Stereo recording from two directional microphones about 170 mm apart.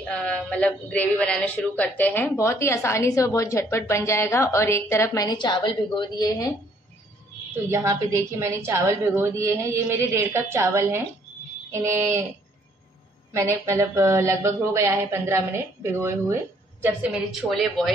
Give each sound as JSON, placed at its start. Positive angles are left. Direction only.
{"t": 0.0, "sound": "a woman's voice", "side_deg": 5}
{"t": 7.7, "sound": "a woman's voice", "side_deg": -15}
{"t": 13.3, "sound": "a woman's voice", "side_deg": -15}